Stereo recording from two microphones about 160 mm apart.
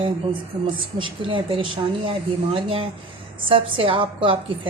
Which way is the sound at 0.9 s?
30° right (ahead or behind).